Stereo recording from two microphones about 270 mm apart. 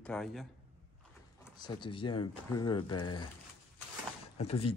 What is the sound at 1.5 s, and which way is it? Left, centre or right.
Speech, centre.